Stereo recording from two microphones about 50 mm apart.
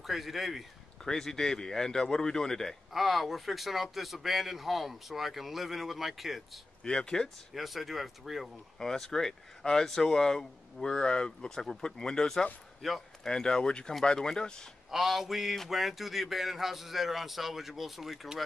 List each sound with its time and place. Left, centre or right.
0.0 s speech: centre
1.0 s speech: centre
2.9 s speech: centre
6.8 s speech: centre
7.5 s speech: centre
12.8 s speech: centre
13.2 s speech: centre
14.9 s speech: centre